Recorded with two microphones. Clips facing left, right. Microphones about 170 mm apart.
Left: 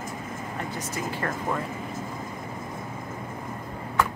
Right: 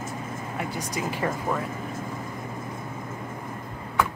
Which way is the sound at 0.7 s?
15° right (ahead or behind).